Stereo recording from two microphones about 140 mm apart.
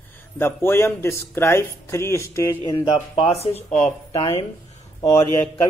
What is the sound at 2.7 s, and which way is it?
Speech, 35° left (ahead or behind).